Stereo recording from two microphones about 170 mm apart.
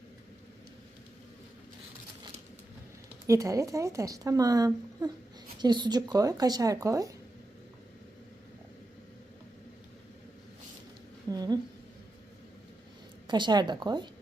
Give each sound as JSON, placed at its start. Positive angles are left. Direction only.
{"t": 3.2, "sound": "a woman's voice", "side_deg": -20}
{"t": 11.3, "sound": "a sound", "side_deg": -25}
{"t": 13.2, "sound": "a woman's voice", "side_deg": -25}